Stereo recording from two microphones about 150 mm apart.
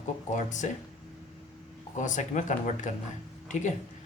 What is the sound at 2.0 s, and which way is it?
Speech, 55° left (ahead or behind).